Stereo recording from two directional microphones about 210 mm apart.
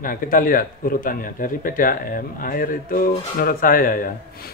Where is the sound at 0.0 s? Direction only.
40° left (ahead or behind).